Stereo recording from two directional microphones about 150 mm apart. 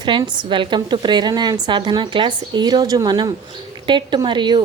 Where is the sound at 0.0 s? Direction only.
30° right (ahead or behind).